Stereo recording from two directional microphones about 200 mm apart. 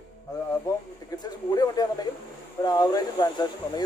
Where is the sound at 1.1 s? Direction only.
20° left (ahead or behind).